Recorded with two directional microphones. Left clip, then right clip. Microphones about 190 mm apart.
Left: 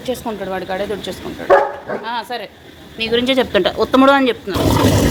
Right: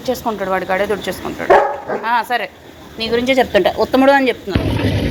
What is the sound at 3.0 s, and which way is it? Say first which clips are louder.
A woman's voice: right 1 dB; 10° left (ahead or behind).